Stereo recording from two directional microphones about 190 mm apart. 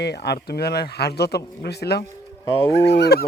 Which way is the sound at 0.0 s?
60° left (ahead or behind).